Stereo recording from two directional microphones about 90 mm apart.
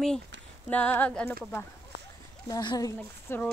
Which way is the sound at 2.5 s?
50° left (ahead or behind).